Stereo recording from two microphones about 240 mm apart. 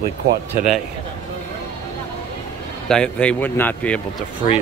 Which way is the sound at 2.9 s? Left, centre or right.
Centre.